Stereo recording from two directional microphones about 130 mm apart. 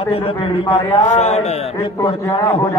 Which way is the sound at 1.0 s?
60° left (ahead or behind).